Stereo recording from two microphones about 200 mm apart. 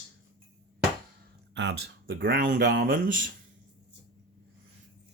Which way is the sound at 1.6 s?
60° right (ahead or behind).